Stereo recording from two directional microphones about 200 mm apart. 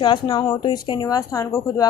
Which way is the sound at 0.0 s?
20° left (ahead or behind).